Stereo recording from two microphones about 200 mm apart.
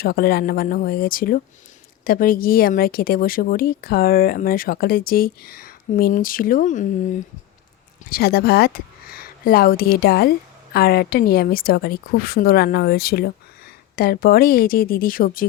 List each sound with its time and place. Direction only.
0.0 s speech: 50° left (ahead or behind)
8.1 s speech: 50° left (ahead or behind)